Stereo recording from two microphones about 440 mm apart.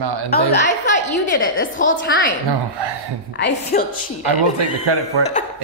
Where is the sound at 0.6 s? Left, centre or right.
Centre.